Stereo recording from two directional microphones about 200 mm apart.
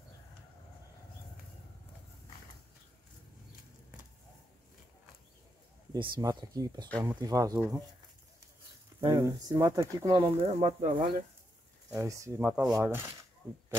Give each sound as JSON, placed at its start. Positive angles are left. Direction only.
{"t": 5.9, "sound": "speech", "side_deg": -20}
{"t": 9.0, "sound": "speech", "side_deg": -20}
{"t": 11.9, "sound": "speech", "side_deg": -15}